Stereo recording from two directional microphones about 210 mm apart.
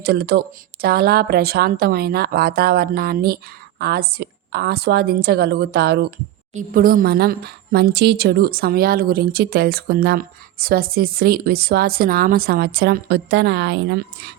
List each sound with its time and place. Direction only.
0.0 s a woman's voice: 50° right (ahead or behind)
6.5 s a woman's voice: 40° right (ahead or behind)